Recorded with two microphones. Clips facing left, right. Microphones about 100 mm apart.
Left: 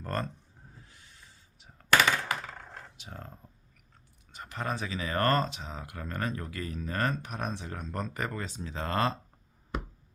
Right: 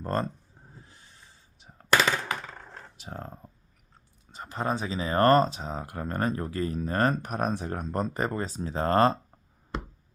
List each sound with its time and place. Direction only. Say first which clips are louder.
0.0 s speech: right 5 dB; 25° right (ahead or behind)
0.8 s a sound: right 2 dB; 30° right (ahead or behind)
3.0 s speech: right 6 dB; 35° right (ahead or behind)